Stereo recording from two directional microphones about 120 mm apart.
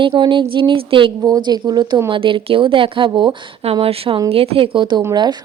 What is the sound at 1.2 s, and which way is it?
A woman's voice, 35° right (ahead or behind).